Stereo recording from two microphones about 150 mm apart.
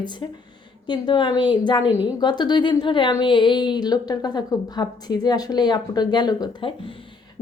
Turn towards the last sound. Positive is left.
turn(degrees=25)  # may be behind; listen again after turning